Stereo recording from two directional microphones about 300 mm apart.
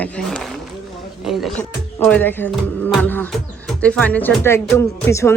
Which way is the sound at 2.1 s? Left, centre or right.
Centre.